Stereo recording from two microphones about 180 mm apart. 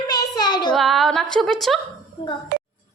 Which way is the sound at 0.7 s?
Centre (ahead or behind).